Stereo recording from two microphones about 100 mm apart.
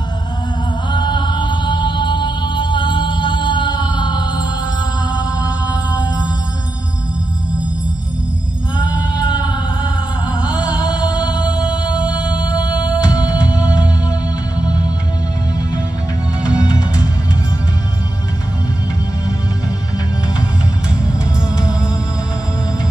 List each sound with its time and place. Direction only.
0.9 s music: 50° left (ahead or behind)
8.8 s music: 40° left (ahead or behind)
10.8 s music: 45° left (ahead or behind)
11.1 s music: 10° right (ahead or behind)
13.1 s music: 45° left (ahead or behind)
13.5 s music: 10° right (ahead or behind)
16.4 s music: 40° left (ahead or behind)
21.5 s music: 10° right (ahead or behind)